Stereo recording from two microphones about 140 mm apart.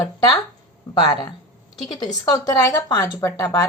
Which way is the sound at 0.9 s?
35° left (ahead or behind).